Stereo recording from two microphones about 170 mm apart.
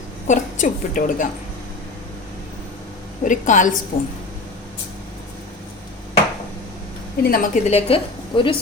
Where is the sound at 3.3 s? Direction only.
50° left (ahead or behind).